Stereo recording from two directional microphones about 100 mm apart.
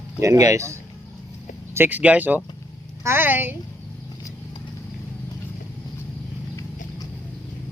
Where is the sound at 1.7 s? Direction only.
20° right (ahead or behind).